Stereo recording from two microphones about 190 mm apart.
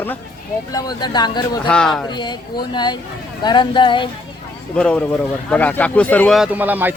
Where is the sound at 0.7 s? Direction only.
20° left (ahead or behind).